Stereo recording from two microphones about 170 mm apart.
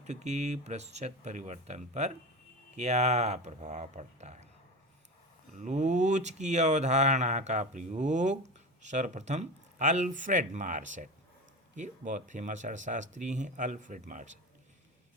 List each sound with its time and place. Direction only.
0.0 s speech: 40° right (ahead or behind)
5.5 s speech: 45° right (ahead or behind)